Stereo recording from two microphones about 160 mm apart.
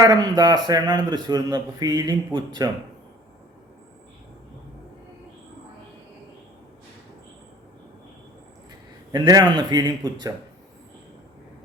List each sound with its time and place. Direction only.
0.0 s speech: 25° right (ahead or behind)
9.1 s speech: 25° right (ahead or behind)